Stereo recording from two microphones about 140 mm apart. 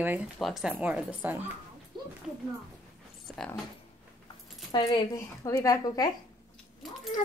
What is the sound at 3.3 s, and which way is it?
Speech, centre (ahead or behind).